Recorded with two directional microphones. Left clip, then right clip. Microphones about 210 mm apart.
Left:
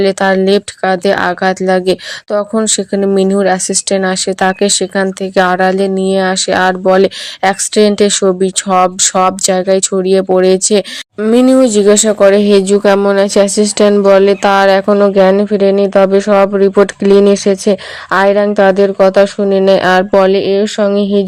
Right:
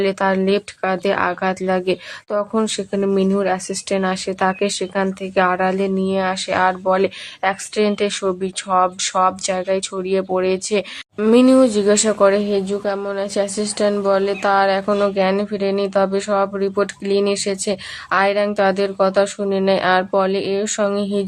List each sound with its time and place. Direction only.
0.0 s speech: 25° left (ahead or behind)